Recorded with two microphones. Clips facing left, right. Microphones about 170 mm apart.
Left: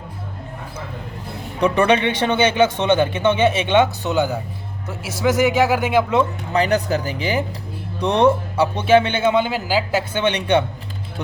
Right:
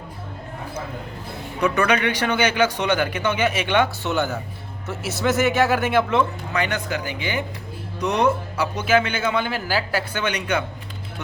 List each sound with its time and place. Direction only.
1.6 s a man's voice: 30° left (ahead or behind)
6.5 s a man's voice: 35° left (ahead or behind)